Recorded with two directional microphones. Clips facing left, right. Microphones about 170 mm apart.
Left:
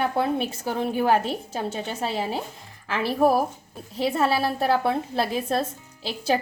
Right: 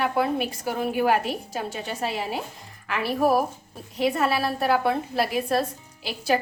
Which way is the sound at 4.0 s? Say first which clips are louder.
Left 1 dB; 30° left (ahead or behind).